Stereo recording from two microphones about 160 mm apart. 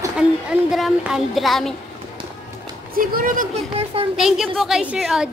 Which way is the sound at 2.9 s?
65° right (ahead or behind).